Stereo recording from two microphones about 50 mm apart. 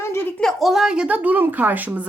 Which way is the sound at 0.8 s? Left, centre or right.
Centre.